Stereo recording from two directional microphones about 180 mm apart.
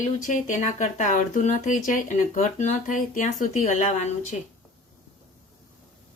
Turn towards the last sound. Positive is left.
turn(degrees=40)  # may be behind; listen again after turning